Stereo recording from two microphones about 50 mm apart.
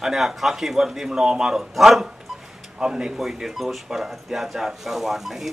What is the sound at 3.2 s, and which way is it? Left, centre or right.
Speech, centre.